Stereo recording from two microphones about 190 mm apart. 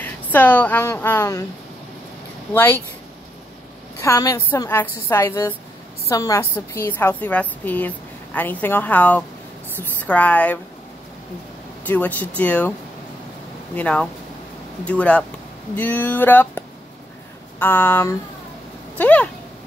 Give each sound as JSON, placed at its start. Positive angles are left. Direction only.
{"t": 0.0, "sound": "a woman's voice", "side_deg": 10}
{"t": 2.5, "sound": "a woman's voice", "side_deg": 10}
{"t": 4.0, "sound": "a woman's voice", "side_deg": 15}
{"t": 11.8, "sound": "a woman's voice", "side_deg": 10}
{"t": 13.7, "sound": "a woman's voice", "side_deg": 5}